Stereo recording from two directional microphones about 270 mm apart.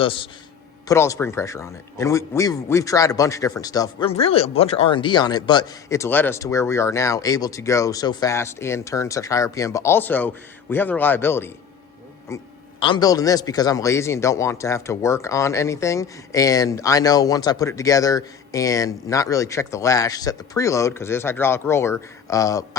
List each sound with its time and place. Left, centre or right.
0.0 s a man's voice: centre